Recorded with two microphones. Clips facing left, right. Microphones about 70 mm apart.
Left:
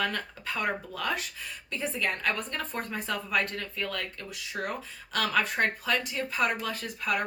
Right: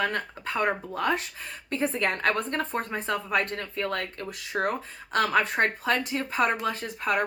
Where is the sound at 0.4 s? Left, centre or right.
Right.